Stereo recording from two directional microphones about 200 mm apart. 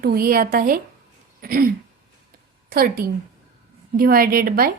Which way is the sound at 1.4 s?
45° right (ahead or behind).